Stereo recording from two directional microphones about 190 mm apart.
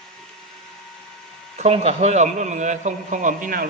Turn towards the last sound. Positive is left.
turn(degrees=-45)  # may be behind; listen again after turning